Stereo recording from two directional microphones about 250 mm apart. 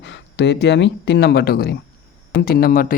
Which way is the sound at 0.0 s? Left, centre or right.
Left.